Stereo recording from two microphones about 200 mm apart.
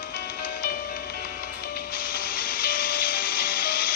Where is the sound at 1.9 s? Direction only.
45° left (ahead or behind).